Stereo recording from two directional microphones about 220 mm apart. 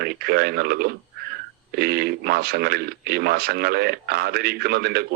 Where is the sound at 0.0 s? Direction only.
45° right (ahead or behind).